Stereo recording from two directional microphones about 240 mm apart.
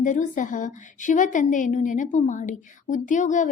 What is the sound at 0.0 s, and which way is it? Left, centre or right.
A woman's voice, left.